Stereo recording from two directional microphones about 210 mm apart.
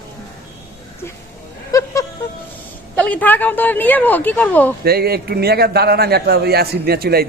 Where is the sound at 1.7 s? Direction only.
15° left (ahead or behind).